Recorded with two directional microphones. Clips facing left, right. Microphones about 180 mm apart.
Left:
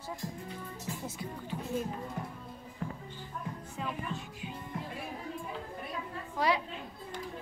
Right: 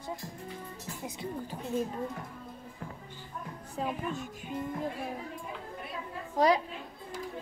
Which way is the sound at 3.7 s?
45° right (ahead or behind).